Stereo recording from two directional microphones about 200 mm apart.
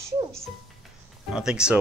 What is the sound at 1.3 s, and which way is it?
Speech, 5° right (ahead or behind).